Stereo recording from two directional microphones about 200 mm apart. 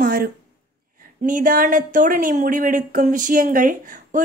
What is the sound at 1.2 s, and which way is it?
A woman's voice, 45° right (ahead or behind).